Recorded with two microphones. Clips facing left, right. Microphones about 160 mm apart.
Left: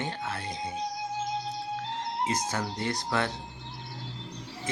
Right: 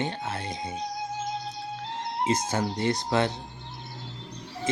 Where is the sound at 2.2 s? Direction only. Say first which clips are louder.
Right 6 dB; 25° right (ahead or behind).